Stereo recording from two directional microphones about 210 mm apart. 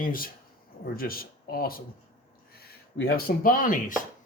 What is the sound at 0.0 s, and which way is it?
Speech, 40° left (ahead or behind).